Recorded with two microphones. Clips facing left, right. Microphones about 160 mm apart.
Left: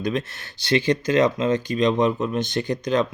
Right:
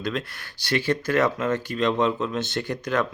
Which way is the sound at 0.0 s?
20° left (ahead or behind).